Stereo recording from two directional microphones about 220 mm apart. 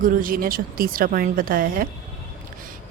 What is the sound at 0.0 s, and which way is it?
Speech, 40° right (ahead or behind).